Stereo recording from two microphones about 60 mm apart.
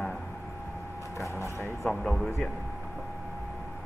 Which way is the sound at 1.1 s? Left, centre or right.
Left.